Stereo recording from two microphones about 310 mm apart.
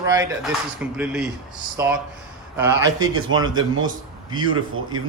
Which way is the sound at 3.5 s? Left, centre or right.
Right.